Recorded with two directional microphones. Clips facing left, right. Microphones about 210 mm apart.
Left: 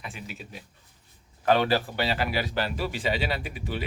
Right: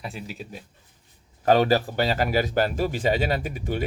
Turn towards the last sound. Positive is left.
turn(degrees=-45)  # may be behind; listen again after turning